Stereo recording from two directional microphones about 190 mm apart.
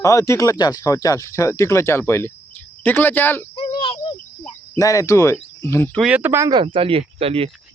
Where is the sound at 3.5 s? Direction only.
25° left (ahead or behind).